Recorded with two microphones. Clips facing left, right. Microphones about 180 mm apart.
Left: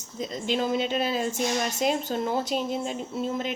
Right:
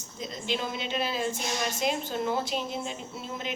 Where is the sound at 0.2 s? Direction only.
45° left (ahead or behind).